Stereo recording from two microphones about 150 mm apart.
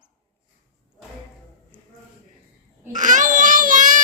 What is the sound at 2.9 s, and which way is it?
Baby cry, 55° right (ahead or behind).